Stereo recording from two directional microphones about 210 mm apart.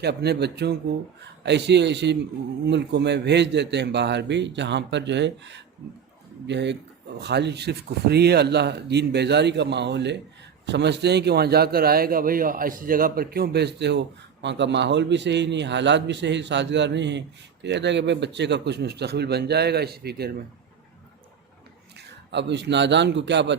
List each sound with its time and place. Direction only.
0.0 s a man's voice: 50° right (ahead or behind)
21.9 s speech: 55° right (ahead or behind)